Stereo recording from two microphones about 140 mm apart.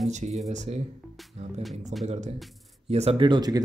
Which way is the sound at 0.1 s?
55° right (ahead or behind).